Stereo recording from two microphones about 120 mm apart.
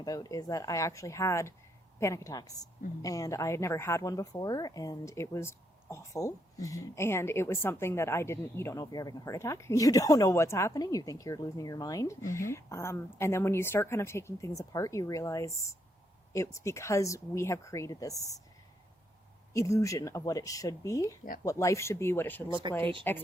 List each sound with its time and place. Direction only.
0.0 s a woman's voice: 30° left (ahead or behind)
19.5 s a woman's voice: 25° left (ahead or behind)